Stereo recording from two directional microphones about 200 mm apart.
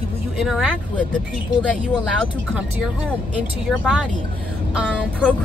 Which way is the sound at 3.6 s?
Centre (ahead or behind).